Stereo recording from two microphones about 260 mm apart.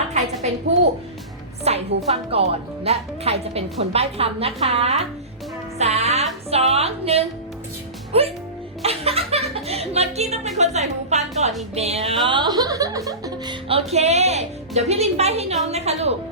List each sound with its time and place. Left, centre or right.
1.7 s speech: right
5.8 s music: right
6.5 s speech: right
8.8 s chuckle: right
10.6 s a woman's voice: right